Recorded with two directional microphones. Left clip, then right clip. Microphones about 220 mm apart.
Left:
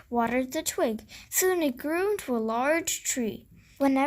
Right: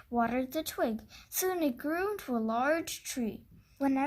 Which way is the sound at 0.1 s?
30° left (ahead or behind).